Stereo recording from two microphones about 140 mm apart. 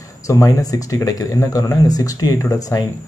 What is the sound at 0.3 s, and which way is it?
Speech, 25° left (ahead or behind).